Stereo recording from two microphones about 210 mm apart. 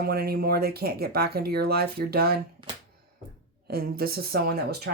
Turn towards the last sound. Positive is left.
turn(degrees=-50)  # may be behind; listen again after turning